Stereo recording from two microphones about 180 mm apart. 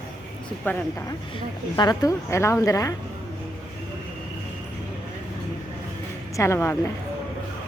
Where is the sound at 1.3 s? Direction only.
25° left (ahead or behind).